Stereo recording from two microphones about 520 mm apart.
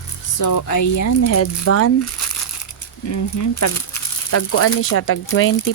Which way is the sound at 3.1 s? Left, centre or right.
Left.